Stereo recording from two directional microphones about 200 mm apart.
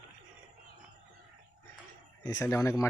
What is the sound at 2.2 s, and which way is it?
Speech, 15° left (ahead or behind).